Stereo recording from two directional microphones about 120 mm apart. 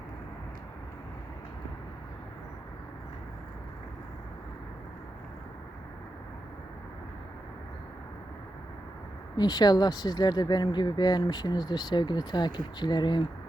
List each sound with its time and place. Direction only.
9.3 s speech: 35° left (ahead or behind)